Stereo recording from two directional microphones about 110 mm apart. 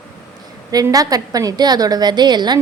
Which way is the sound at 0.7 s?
35° right (ahead or behind).